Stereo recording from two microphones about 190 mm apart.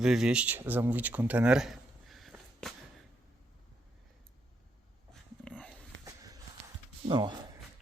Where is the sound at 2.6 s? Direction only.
Centre (ahead or behind).